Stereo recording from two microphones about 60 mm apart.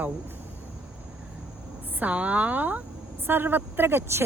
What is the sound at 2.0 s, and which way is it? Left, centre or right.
A woman's voice, right.